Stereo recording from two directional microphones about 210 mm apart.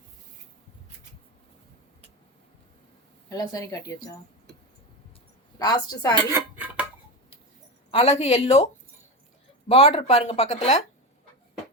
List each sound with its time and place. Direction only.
3.2 s a woman's voice: 15° left (ahead or behind)
5.5 s speech: 20° left (ahead or behind)
6.3 s dishes: 5° right (ahead or behind)
7.9 s speech: 30° left (ahead or behind)
9.7 s speech: 30° left (ahead or behind)